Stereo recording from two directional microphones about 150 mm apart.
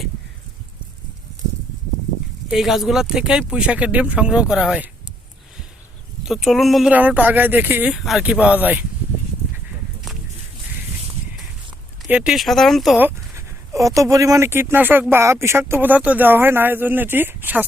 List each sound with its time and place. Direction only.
2.5 s speech: centre (ahead or behind)
6.2 s speech: 5° right (ahead or behind)
12.0 s speech: 5° right (ahead or behind)
13.0 s speech: 15° right (ahead or behind)